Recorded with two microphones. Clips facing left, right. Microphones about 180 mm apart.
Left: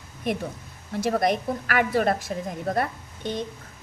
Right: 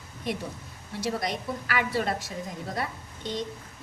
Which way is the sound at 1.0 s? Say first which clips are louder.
Left 7 dB; 55° left (ahead or behind).